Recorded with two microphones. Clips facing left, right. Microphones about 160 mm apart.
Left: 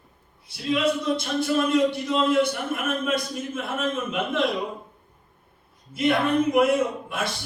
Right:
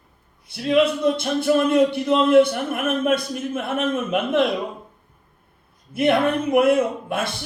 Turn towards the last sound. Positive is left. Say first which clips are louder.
# right 3 dB
turn(degrees=-55)  # may be behind; listen again after turning